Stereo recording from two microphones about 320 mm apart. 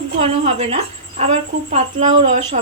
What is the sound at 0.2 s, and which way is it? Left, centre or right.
A woman's voice, centre.